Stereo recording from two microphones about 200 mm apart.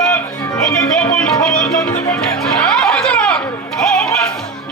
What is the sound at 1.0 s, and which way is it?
Music, 5° left (ahead or behind).